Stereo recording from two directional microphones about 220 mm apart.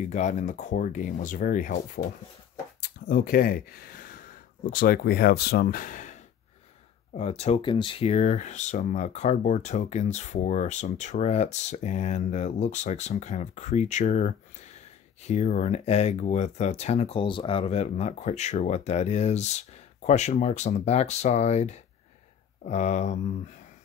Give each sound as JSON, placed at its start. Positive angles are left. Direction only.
{"t": 0.0, "sound": "speech", "side_deg": 30}
{"t": 3.1, "sound": "speech", "side_deg": 40}
{"t": 7.2, "sound": "speech", "side_deg": 30}